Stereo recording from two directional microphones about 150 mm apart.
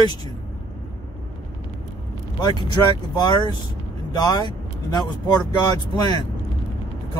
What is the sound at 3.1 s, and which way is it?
Speech, 30° left (ahead or behind).